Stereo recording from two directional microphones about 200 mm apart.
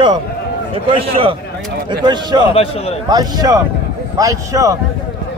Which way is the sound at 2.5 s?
30° left (ahead or behind).